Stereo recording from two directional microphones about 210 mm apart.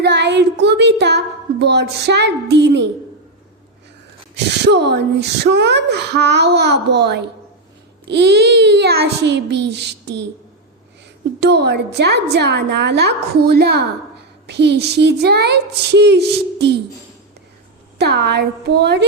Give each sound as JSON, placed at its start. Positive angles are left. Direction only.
{"t": 0.0, "sound": "a sound", "side_deg": -55}
{"t": 0.6, "sound": "speech", "side_deg": -55}
{"t": 4.4, "sound": "speech", "side_deg": -55}
{"t": 11.3, "sound": "speech", "side_deg": -55}
{"t": 17.9, "sound": "speech", "side_deg": -50}